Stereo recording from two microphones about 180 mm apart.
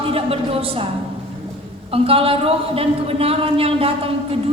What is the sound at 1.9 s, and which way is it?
Speech, 30° right (ahead or behind).